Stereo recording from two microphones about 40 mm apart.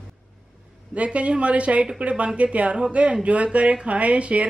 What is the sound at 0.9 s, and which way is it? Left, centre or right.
A woman's voice, right.